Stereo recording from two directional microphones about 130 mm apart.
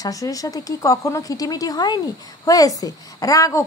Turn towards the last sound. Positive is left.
turn(degrees=25)  # may be behind; listen again after turning